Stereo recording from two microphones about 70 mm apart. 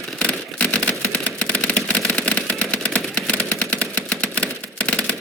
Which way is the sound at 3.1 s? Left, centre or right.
Centre.